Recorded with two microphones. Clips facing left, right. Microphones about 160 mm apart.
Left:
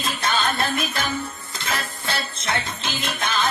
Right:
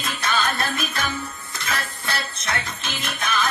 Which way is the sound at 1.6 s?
25° left (ahead or behind).